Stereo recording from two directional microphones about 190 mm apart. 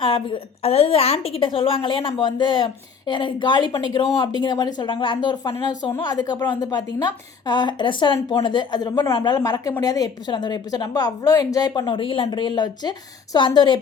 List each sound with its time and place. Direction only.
0.0 s speech: 25° left (ahead or behind)